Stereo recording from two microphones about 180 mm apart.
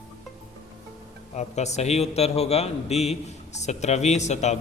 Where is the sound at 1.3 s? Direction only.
40° left (ahead or behind).